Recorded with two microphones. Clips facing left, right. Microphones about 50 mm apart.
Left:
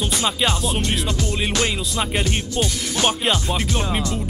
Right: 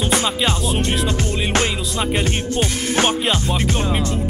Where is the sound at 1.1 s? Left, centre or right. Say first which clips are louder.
Right 3 dB; right.